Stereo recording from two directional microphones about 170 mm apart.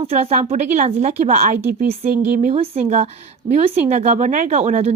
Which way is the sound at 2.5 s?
35° right (ahead or behind).